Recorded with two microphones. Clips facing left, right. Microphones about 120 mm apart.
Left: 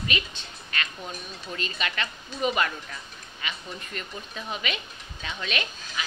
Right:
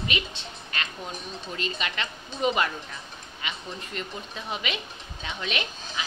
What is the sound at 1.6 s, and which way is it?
A woman's voice, 20° right (ahead or behind).